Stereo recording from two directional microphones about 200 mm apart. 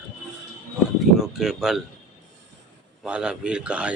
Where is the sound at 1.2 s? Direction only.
Centre (ahead or behind).